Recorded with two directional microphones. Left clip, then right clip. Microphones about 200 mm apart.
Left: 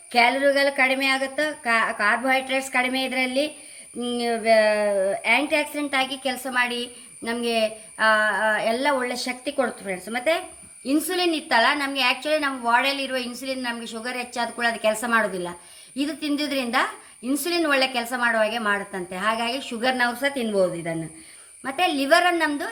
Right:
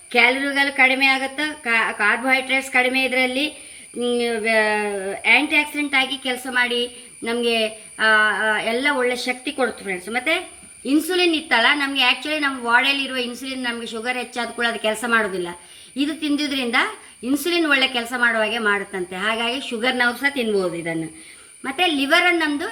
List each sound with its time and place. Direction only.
0.1 s a woman's voice: 50° left (ahead or behind)